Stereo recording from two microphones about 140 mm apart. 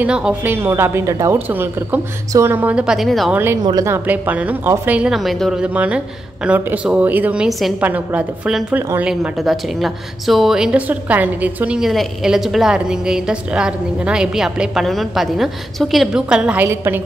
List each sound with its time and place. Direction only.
0.0 s a woman's voice: 10° right (ahead or behind)
3.6 s a woman's voice: 25° right (ahead or behind)